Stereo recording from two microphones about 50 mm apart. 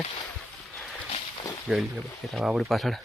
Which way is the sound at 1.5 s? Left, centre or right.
Left.